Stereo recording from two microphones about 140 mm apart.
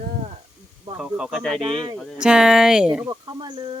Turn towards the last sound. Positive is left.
turn(degrees=-30)  # may be behind; listen again after turning